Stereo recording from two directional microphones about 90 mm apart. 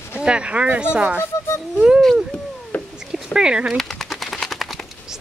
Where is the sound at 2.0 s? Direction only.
5° left (ahead or behind).